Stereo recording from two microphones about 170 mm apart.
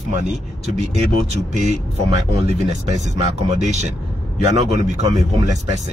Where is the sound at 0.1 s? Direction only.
45° right (ahead or behind).